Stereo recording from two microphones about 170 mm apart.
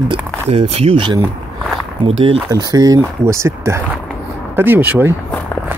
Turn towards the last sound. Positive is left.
turn(degrees=-10)  # may be behind; listen again after turning